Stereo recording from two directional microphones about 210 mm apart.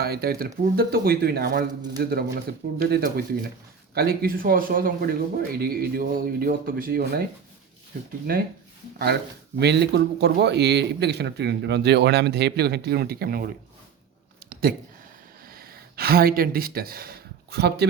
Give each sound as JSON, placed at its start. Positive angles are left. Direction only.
{"t": 0.0, "sound": "speech", "side_deg": -45}
{"t": 9.6, "sound": "speech", "side_deg": -50}
{"t": 14.5, "sound": "a sound", "side_deg": -45}